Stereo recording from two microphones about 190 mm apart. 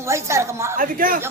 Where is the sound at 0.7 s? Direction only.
45° right (ahead or behind).